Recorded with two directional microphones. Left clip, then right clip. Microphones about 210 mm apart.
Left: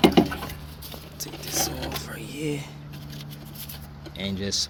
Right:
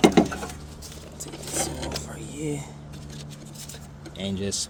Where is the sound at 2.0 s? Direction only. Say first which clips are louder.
Left 1 dB; 5° right (ahead or behind).